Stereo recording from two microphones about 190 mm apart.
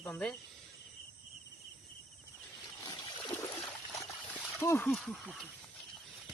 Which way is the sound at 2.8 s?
25° left (ahead or behind).